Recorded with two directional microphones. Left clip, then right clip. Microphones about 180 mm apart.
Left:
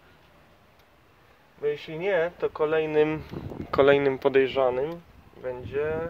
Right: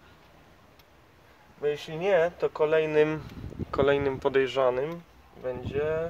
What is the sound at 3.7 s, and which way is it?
Speech, 30° left (ahead or behind).